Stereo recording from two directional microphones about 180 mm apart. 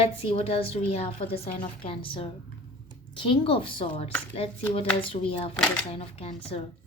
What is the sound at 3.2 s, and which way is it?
A woman's voice, 30° left (ahead or behind).